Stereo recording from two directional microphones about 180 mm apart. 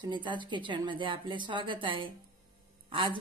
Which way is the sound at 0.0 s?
25° right (ahead or behind).